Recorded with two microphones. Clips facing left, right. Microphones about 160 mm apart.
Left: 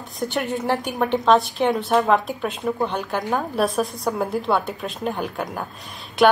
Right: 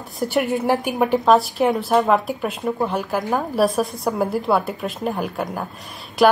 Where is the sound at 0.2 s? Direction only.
5° right (ahead or behind).